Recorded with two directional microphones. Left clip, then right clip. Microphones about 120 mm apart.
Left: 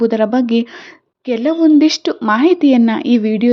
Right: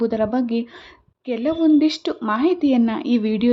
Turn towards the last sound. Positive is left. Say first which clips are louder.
# left 6 dB
turn(degrees=20)  # may be behind; listen again after turning